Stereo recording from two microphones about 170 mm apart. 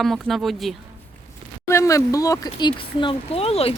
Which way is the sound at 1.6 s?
15° left (ahead or behind).